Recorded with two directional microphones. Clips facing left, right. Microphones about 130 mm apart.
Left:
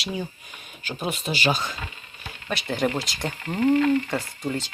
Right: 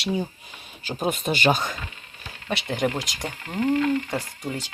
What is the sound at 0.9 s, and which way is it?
Speech, 40° right (ahead or behind).